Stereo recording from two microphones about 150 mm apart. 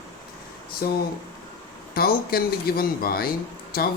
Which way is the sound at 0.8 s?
90° left.